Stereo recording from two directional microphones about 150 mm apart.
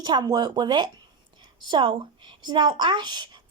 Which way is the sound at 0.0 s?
25° right (ahead or behind).